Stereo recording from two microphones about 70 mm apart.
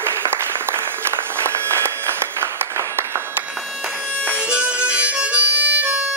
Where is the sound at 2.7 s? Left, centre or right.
Right.